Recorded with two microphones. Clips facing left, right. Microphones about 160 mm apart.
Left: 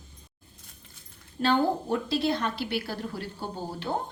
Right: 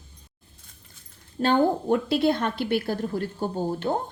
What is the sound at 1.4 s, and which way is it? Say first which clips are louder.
A woman's voice: right 3 dB; 45° right (ahead or behind).